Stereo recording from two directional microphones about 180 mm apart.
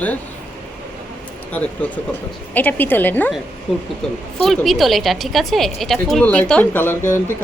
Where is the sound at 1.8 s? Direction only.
10° left (ahead or behind).